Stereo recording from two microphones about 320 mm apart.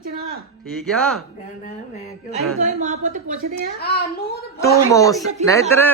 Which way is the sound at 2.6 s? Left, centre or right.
Right.